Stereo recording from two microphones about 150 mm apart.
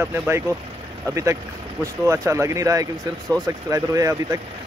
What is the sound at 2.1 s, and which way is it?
Speech, 20° right (ahead or behind).